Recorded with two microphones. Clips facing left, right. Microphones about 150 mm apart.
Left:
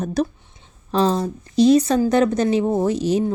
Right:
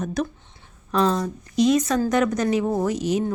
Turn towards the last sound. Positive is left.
turn(degrees=30)  # may be behind; listen again after turning